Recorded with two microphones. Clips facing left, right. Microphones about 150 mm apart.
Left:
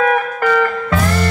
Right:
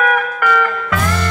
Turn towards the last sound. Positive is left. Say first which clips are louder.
# left 2 dB
turn(degrees=30)  # may be behind; listen again after turning